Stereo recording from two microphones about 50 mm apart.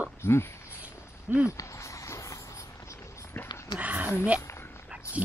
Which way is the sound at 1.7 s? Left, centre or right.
Left.